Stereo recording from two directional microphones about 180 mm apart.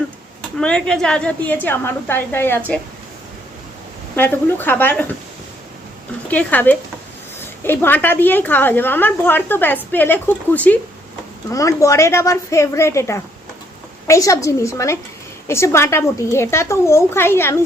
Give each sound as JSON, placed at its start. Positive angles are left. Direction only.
{"t": 0.6, "sound": "a woman's voice", "side_deg": 5}
{"t": 4.1, "sound": "a woman's voice", "side_deg": 10}
{"t": 6.2, "sound": "a woman's voice", "side_deg": 10}